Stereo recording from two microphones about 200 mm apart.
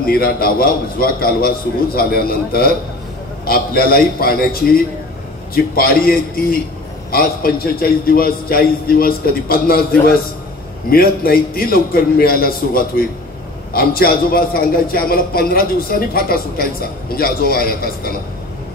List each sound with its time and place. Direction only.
0.0 s a man's voice: 50° left (ahead or behind)